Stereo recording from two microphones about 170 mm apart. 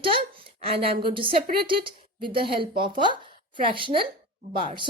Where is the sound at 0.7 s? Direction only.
35° right (ahead or behind).